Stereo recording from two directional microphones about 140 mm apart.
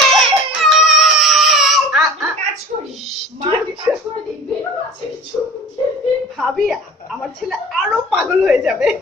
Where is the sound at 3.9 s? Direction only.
15° right (ahead or behind).